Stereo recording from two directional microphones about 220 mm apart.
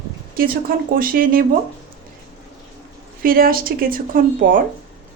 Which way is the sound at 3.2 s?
40° right (ahead or behind).